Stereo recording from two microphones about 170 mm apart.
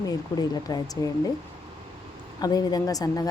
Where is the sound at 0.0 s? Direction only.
20° left (ahead or behind).